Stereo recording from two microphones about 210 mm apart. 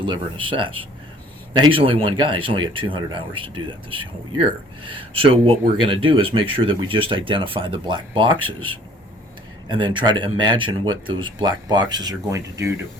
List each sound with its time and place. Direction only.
0.0 s speech: 25° right (ahead or behind)